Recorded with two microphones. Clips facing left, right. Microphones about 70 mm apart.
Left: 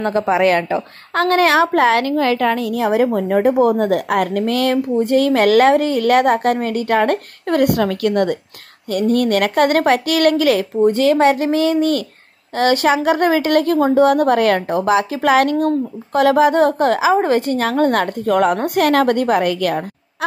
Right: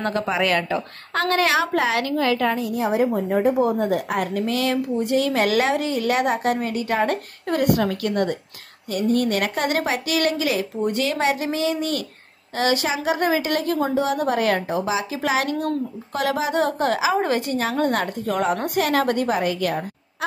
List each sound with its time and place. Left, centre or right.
0.2 s a woman's voice: left
2.4 s a woman's voice: left
10.8 s a woman's voice: left